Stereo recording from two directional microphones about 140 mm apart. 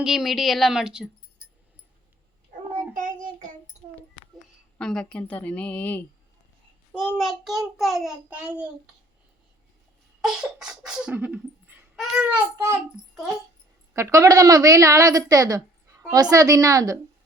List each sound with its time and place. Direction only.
0.0 s a child's voice: centre (ahead or behind)
2.9 s child singing: 70° right (ahead or behind)
4.8 s a woman's voice: 5° left (ahead or behind)
6.9 s a child's voice: centre (ahead or behind)
10.2 s a child's voice: 5° right (ahead or behind)
13.9 s a woman's voice: 20° right (ahead or behind)